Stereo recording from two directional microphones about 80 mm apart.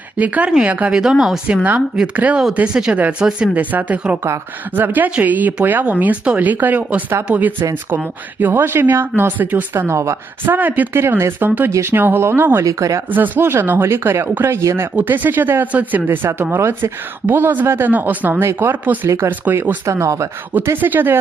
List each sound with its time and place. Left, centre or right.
0.2 s speech: centre
2.1 s speech: centre
4.2 s speech: right
9.7 s speech: right
10.4 s speech: right
11.0 s speech: right
12.6 s speech: right
13.1 s speech: right
14.9 s speech: right
19.3 s speech: right
19.8 s speech: right
20.7 s speech: right